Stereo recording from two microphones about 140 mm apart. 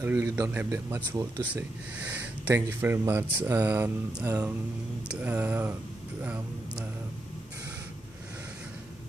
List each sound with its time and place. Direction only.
0.0 s speech: 20° right (ahead or behind)
1.5 s speech: 10° right (ahead or behind)